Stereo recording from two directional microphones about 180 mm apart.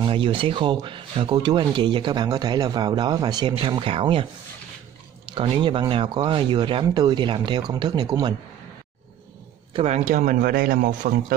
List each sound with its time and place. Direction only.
0.0 s speech: 30° right (ahead or behind)
5.3 s speech: 30° right (ahead or behind)
9.8 s speech: 40° right (ahead or behind)